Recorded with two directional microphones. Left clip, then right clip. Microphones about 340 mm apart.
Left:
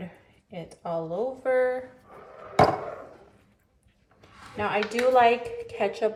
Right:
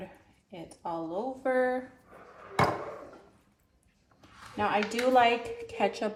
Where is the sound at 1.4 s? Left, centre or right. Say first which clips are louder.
Left 3 dB; centre.